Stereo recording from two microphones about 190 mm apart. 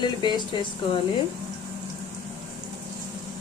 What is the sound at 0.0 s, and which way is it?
Speech, 25° left (ahead or behind).